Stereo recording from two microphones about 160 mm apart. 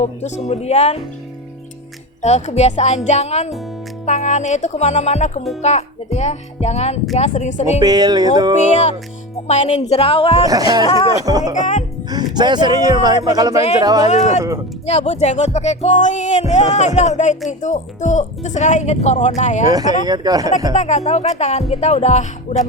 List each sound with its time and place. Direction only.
0.0 s speech: 45° left (ahead or behind)
2.2 s speech: 45° left (ahead or behind)
7.8 s speech: 25° right (ahead or behind)
8.5 s speech: 50° left (ahead or behind)
10.4 s speech: 20° right (ahead or behind)
10.8 s speech: 35° left (ahead or behind)
11.3 s speech: 25° right (ahead or behind)
11.5 s speech: 50° left (ahead or behind)
12.0 s speech: 25° right (ahead or behind)
14.8 s speech: 40° left (ahead or behind)
19.6 s speech: 25° right (ahead or behind)
20.7 s speech: 45° left (ahead or behind)